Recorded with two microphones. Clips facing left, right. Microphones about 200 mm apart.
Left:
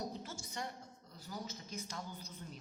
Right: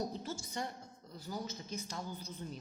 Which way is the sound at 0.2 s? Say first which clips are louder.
Right 5 dB; 30° right (ahead or behind).